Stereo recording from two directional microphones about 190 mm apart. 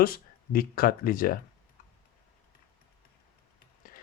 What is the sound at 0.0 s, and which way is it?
Speech, 50° left (ahead or behind).